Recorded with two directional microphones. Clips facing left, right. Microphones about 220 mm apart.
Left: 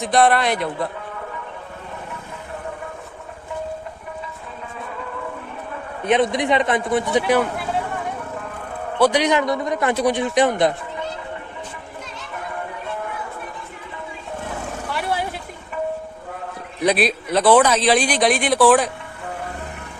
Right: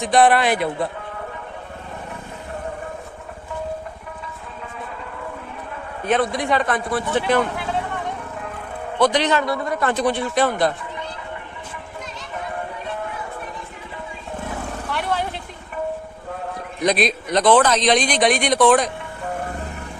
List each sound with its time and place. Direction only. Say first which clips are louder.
0.0 s speech: right 1 dB; centre (ahead or behind)
6.1 s speech: left 2 dB; 20° left (ahead or behind)
9.0 s a man's voice: left 1 dB; 10° left (ahead or behind)
14.8 s vehicle: even; 5° left (ahead or behind)
16.8 s speech: left 1 dB; 5° left (ahead or behind)